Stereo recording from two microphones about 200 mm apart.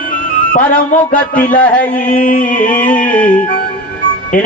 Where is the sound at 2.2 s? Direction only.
45° left (ahead or behind).